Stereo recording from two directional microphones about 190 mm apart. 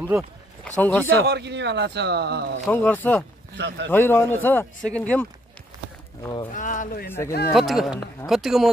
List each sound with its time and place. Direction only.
0.7 s speech: 5° left (ahead or behind)
1.0 s speech: 65° right (ahead or behind)
2.7 s speech: 10° left (ahead or behind)
3.5 s speech: 65° right (ahead or behind)
3.9 s speech: 10° left (ahead or behind)
6.2 s speech: 25° left (ahead or behind)
6.5 s speech: 45° left (ahead or behind)
7.1 s speech: 15° left (ahead or behind)
7.5 s speech: centre (ahead or behind)